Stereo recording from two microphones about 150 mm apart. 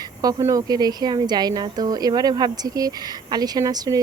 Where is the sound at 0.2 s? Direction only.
25° right (ahead or behind).